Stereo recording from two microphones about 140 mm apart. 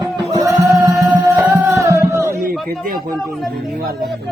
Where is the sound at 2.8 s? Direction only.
Centre (ahead or behind).